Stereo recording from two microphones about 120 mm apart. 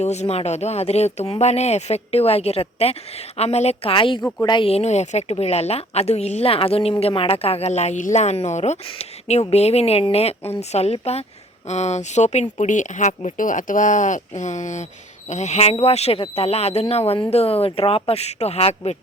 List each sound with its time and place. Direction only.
0.0 s speech: 70° left (ahead or behind)
3.9 s a woman's voice: 45° left (ahead or behind)
4.2 s speech: 15° left (ahead or behind)
4.4 s speech: 40° left (ahead or behind)
4.7 s speech: 65° left (ahead or behind); by 14.8 s 85° left
15.3 s speech: 75° left (ahead or behind)